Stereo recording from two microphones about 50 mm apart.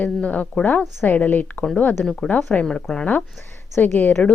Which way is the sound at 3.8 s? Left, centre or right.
Left.